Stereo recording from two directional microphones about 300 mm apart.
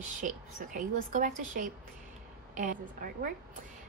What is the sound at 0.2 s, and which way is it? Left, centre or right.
A woman's voice, right.